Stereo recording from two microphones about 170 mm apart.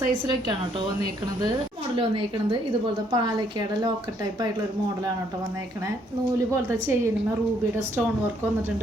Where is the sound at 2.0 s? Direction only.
30° right (ahead or behind).